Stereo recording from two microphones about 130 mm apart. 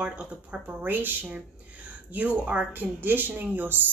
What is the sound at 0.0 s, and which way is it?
Speech, 10° right (ahead or behind).